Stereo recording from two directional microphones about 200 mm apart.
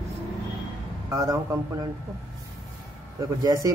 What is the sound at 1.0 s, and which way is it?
Speech, 15° right (ahead or behind).